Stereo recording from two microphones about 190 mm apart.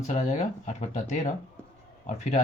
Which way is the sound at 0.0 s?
35° left (ahead or behind).